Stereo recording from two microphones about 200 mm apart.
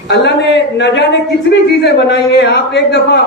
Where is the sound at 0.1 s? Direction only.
60° left (ahead or behind).